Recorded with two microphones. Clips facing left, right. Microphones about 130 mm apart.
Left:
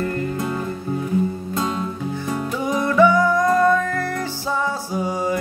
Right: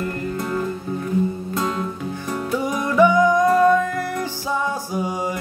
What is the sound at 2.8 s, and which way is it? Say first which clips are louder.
Music: even; 15° right (ahead or behind).